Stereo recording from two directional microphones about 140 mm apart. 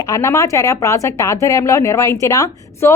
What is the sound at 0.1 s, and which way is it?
A woman's voice, 20° left (ahead or behind).